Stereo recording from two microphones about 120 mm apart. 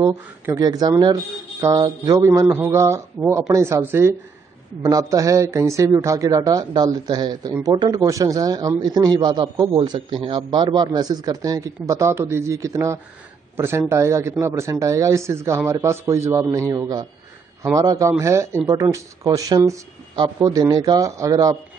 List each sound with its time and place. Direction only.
0.0 s a man's voice: 25° right (ahead or behind)